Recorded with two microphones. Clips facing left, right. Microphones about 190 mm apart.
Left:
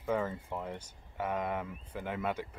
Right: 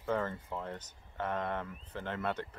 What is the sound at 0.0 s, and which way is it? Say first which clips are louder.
Speech: left 1 dB; 10° left (ahead or behind).